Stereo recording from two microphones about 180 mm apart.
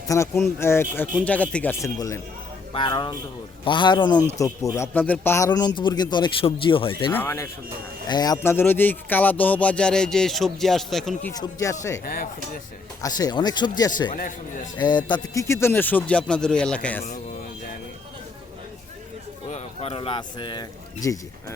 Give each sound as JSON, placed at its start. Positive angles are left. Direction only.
{"t": 0.1, "sound": "speech", "side_deg": 15}
{"t": 7.1, "sound": "speech", "side_deg": 10}
{"t": 11.3, "sound": "speech", "side_deg": 15}
{"t": 12.0, "sound": "a man's voice", "side_deg": 55}
{"t": 13.0, "sound": "speech", "side_deg": 20}
{"t": 14.1, "sound": "a man's voice", "side_deg": 45}
{"t": 14.8, "sound": "speech", "side_deg": 25}
{"t": 19.5, "sound": "speech", "side_deg": 35}